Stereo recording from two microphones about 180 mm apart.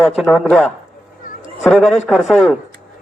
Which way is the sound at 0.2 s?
Centre (ahead or behind).